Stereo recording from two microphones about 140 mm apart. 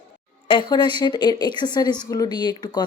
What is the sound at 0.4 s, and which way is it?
Speech, 35° left (ahead or behind).